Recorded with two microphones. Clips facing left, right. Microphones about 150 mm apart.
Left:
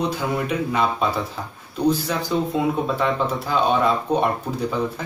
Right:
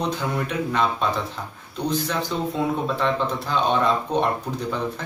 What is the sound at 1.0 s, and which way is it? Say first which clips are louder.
A man's voice: left 2 dB; 5° left (ahead or behind).